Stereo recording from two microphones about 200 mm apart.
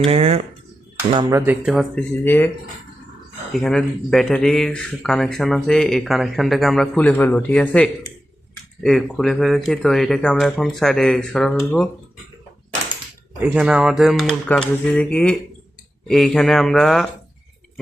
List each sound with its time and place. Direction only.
0.1 s speech: 30° right (ahead or behind)
1.1 s speech: 15° right (ahead or behind)
1.6 s speech: centre (ahead or behind)
2.2 s speech: 10° left (ahead or behind)
3.5 s speech: 5° left (ahead or behind)
13.4 s speech: 5° right (ahead or behind)